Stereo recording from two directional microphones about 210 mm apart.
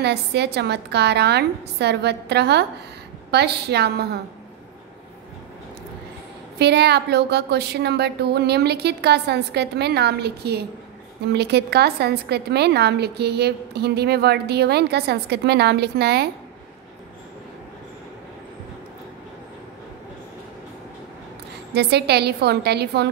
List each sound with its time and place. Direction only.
0.0 s a woman's voice: 50° right (ahead or behind)
6.6 s a woman's voice: 50° right (ahead or behind)
21.7 s a woman's voice: 50° right (ahead or behind)